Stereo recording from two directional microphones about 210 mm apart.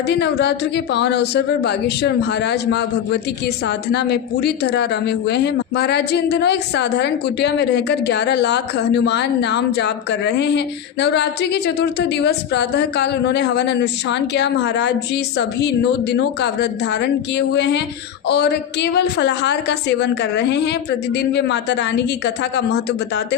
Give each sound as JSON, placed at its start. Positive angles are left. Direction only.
{"t": 0.1, "sound": "a woman's voice", "side_deg": 55}